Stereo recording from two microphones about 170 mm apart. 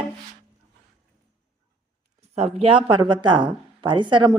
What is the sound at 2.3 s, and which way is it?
Speech, 40° right (ahead or behind).